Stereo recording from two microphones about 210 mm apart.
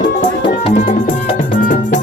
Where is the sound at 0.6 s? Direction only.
35° left (ahead or behind).